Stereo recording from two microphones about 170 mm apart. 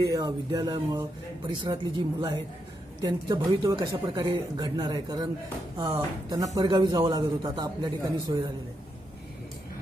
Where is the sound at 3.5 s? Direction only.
20° right (ahead or behind).